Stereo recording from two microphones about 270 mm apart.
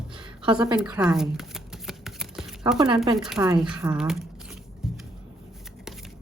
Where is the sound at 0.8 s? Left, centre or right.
Centre.